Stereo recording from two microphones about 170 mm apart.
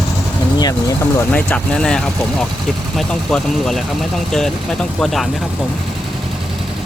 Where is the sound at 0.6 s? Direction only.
20° left (ahead or behind).